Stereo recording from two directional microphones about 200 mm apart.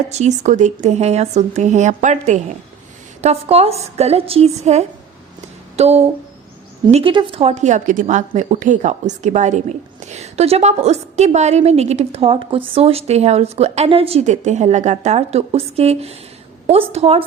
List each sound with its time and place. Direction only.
0.1 s a woman's voice: 35° right (ahead or behind)